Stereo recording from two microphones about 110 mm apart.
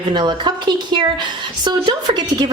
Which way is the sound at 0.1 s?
40° right (ahead or behind).